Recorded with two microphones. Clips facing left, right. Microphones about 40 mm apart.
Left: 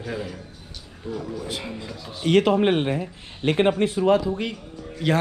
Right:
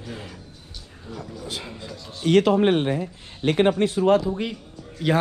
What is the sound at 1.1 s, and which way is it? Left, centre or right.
Speech, left.